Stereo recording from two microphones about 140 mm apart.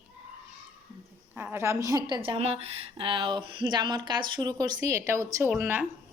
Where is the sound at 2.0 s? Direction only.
35° right (ahead or behind); by 5.8 s 15° right (ahead or behind).